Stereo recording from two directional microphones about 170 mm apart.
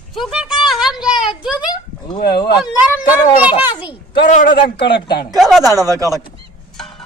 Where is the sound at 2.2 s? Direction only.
65° left (ahead or behind).